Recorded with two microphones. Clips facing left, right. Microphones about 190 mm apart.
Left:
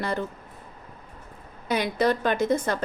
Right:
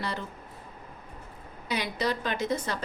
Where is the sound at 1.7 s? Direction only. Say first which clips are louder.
Left 6 dB; 50° left (ahead or behind).